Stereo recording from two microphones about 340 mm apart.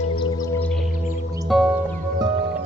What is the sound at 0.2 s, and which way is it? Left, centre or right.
Singing bowl, centre.